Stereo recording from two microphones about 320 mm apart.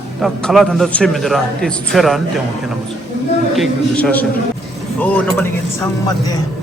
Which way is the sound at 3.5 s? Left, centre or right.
Centre.